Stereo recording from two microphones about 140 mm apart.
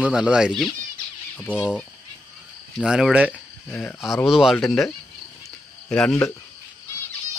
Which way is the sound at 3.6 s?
10° left (ahead or behind).